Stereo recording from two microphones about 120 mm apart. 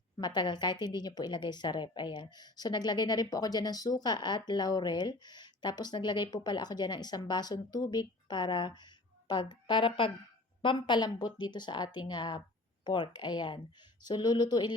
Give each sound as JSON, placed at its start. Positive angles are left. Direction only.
{"t": 0.2, "sound": "a woman's voice", "side_deg": 35}